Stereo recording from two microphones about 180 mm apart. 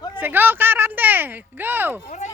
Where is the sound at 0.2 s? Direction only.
10° right (ahead or behind).